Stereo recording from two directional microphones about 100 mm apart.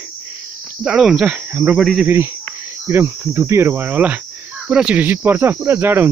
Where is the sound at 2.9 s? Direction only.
25° right (ahead or behind).